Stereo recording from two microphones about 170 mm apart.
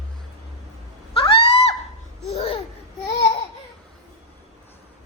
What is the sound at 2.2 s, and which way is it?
Babbling, 40° left (ahead or behind).